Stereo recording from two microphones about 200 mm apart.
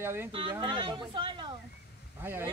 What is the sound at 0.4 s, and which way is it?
Speech, 25° right (ahead or behind).